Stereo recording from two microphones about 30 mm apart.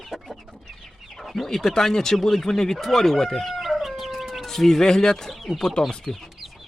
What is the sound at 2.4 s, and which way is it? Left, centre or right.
Speech, centre.